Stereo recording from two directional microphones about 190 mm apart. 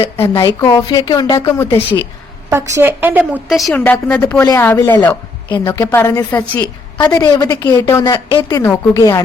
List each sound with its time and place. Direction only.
0.2 s a woman's voice: 15° left (ahead or behind)
2.5 s a woman's voice: 15° right (ahead or behind); by 5.5 s 10° left (ahead or behind)
5.5 s a woman's voice: 20° left (ahead or behind)